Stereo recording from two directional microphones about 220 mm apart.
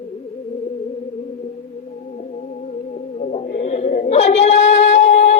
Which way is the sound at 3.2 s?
30° left (ahead or behind).